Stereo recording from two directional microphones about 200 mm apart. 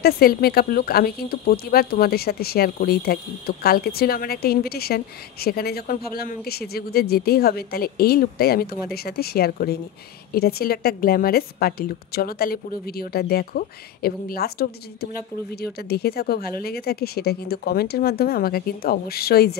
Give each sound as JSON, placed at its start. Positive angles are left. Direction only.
{"t": 0.0, "sound": "speech", "side_deg": 50}